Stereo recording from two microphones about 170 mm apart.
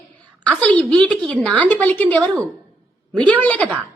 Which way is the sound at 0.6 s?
10° left (ahead or behind).